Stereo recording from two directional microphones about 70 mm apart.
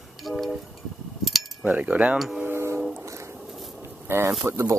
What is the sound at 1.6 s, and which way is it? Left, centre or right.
Cutlery, centre.